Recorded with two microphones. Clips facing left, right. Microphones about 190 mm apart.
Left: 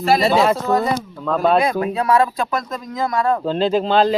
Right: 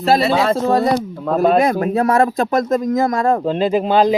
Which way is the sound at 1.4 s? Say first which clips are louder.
Right 3 dB; 45° right (ahead or behind).